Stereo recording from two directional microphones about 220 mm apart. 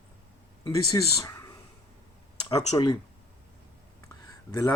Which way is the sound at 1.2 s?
15° left (ahead or behind).